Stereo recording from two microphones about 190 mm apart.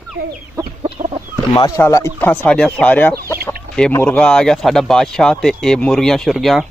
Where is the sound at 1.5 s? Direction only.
20° left (ahead or behind); by 6.7 s centre (ahead or behind).